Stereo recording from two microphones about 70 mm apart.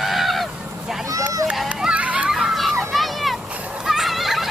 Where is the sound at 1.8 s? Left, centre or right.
Centre.